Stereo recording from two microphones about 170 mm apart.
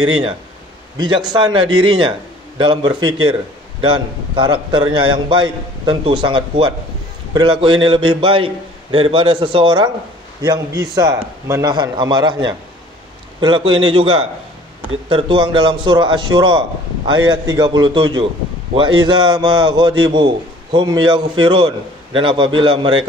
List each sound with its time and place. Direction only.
0.0 s a man's voice: 25° right (ahead or behind)
13.4 s a man's voice: 30° right (ahead or behind)